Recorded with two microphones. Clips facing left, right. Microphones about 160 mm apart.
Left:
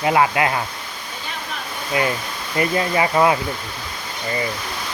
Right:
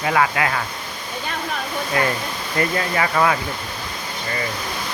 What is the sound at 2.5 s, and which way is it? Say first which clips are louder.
Speech: left 2 dB; 20° left (ahead or behind).